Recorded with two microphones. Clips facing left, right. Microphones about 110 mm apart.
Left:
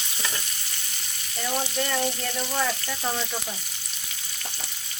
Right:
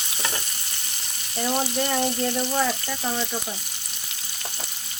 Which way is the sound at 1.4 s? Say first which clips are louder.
Right 3 dB; 20° right (ahead or behind).